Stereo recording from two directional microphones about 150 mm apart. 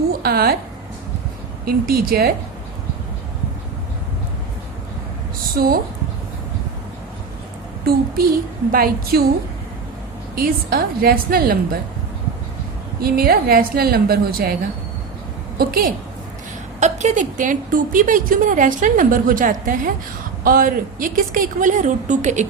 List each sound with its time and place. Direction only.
0.1 s a sound: 90° right
1.6 s a woman's voice: 85° right
5.5 s speech: 80° right
7.9 s a woman's voice: 80° right
10.3 s a woman's voice: 85° right
13.0 s a woman's voice: 90° right
15.5 s a woman's voice: 80° right
16.8 s a woman's voice: 50° right (ahead or behind)